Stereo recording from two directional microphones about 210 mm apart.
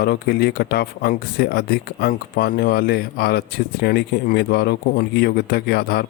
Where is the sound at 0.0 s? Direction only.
45° left (ahead or behind).